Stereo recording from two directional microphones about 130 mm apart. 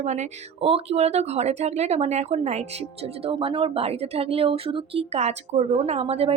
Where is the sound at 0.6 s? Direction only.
50° right (ahead or behind).